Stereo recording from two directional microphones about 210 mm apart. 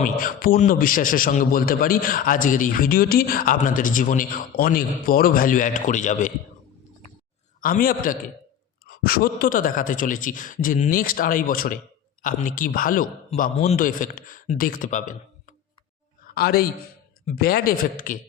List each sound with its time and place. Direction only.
0.0 s a man's voice: 40° left (ahead or behind)
7.6 s a man's voice: 40° left (ahead or behind)